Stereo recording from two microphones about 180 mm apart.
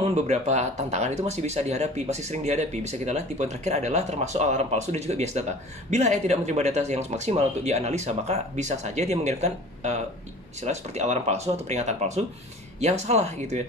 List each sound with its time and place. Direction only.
0.0 s speech: 40° right (ahead or behind)